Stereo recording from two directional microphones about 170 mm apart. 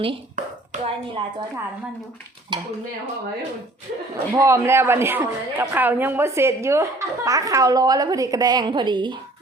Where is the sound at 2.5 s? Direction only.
25° right (ahead or behind).